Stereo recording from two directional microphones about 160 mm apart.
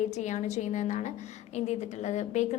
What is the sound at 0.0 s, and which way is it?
A woman's voice, 45° left (ahead or behind).